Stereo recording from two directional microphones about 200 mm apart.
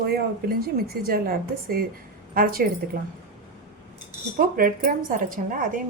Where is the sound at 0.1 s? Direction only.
50° right (ahead or behind).